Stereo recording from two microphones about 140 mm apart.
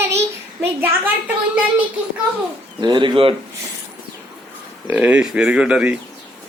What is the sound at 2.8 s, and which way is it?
Bird, 35° right (ahead or behind).